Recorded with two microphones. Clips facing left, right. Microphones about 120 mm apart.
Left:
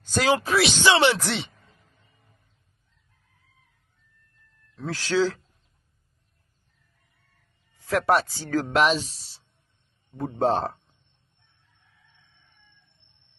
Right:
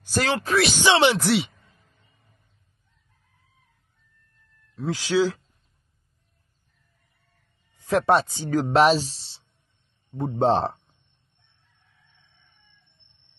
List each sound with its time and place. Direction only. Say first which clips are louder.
0.2 s speech: left 1 dB; 5° left (ahead or behind)
0.8 s speech: right 1 dB; 15° right (ahead or behind)
1.2 s speech: right 7 dB; 5° right (ahead or behind)
4.7 s speech: right 2 dB; 15° right (ahead or behind)
7.8 s speech: right 2 dB; 25° right (ahead or behind)
8.6 s speech: right 5 dB; 35° right (ahead or behind)